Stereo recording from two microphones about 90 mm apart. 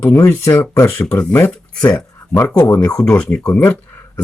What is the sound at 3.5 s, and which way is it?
Speech, 20° left (ahead or behind).